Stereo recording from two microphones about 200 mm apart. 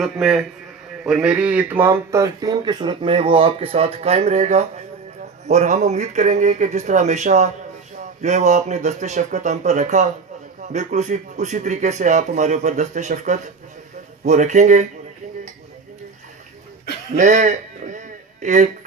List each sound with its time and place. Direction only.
0.0 s a man's voice: centre (ahead or behind); by 14.8 s 35° right (ahead or behind)
17.2 s speech: 35° right (ahead or behind)